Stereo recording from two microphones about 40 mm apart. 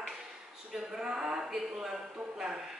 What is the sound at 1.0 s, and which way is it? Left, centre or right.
A woman's voice, centre.